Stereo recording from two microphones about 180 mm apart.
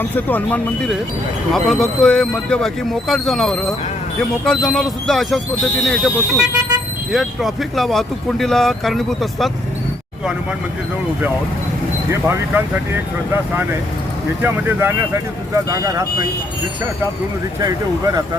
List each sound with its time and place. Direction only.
0.0 s speech: 10° left (ahead or behind)
12.3 s speech: 10° right (ahead or behind)
17.6 s speech: 20° right (ahead or behind)